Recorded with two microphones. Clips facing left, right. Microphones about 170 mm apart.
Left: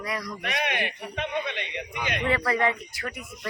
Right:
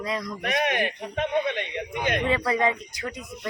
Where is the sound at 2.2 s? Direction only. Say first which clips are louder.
Left 1 dB; 15° right (ahead or behind).